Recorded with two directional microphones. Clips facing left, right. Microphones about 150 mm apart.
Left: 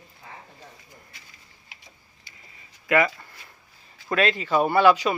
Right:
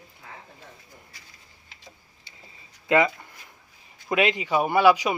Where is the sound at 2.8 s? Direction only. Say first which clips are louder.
Right 1 dB; 20° right (ahead or behind).